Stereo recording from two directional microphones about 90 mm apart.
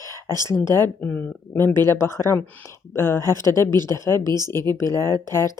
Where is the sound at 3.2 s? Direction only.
45° right (ahead or behind).